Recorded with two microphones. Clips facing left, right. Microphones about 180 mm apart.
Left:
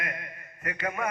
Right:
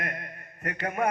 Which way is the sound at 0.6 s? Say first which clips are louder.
Right 2 dB; 35° right (ahead or behind).